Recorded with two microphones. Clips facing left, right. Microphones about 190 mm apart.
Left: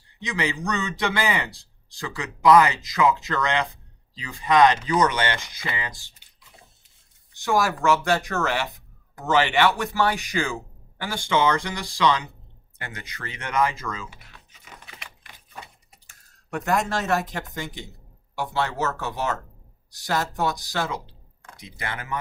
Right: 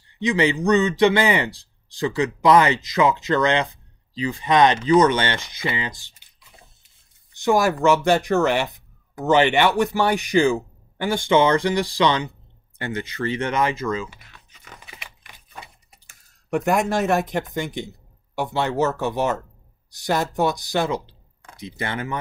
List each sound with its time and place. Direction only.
0.2 s a man's voice: 20° right (ahead or behind)
7.4 s a man's voice: 20° right (ahead or behind)
14.1 s typing: centre (ahead or behind)
16.4 s a man's voice: 15° right (ahead or behind)